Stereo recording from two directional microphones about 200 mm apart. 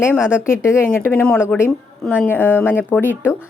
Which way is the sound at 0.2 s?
5° right (ahead or behind).